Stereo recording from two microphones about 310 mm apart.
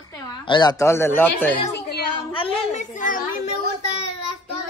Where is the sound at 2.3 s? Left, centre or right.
Centre.